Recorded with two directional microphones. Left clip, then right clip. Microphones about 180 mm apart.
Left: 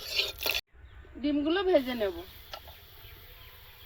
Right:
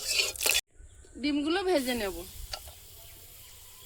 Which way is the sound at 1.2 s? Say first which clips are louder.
Left 1 dB; 35° right (ahead or behind).